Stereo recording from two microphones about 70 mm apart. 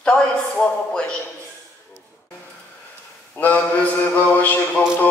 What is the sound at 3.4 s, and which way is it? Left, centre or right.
Mantra, left.